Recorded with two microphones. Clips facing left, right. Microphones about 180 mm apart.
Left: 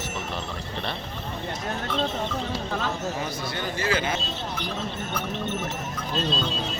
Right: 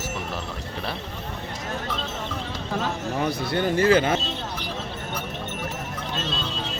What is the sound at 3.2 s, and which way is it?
Speech, 60° right (ahead or behind).